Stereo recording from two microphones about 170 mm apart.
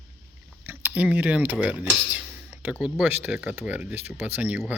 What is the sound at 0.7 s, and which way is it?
Speech, 10° right (ahead or behind).